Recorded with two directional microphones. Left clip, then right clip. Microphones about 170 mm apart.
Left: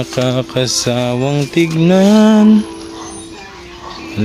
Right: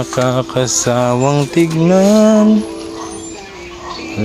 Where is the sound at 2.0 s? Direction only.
50° left (ahead or behind).